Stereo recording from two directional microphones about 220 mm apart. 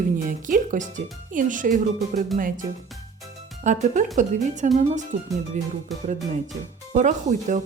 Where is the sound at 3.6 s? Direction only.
35° right (ahead or behind).